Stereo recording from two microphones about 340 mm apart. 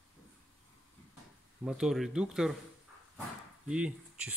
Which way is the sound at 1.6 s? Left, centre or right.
Centre.